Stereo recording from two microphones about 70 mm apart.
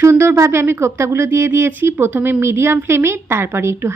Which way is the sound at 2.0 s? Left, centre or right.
Right.